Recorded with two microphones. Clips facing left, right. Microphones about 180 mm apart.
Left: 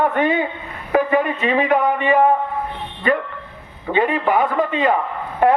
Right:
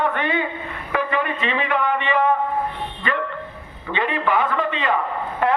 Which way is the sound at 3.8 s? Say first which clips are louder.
Left 5 dB; 45° left (ahead or behind).